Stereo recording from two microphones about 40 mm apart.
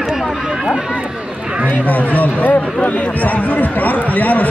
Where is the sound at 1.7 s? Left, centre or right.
Left.